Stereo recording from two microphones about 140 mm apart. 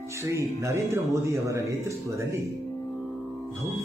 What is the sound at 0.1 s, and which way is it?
Speech, 20° right (ahead or behind).